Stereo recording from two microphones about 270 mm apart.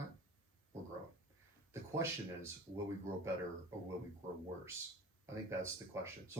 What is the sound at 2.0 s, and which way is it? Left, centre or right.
Speech, centre.